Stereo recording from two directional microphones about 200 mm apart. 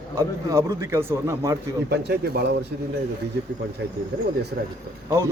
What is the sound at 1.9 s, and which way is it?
Speech, 55° right (ahead or behind).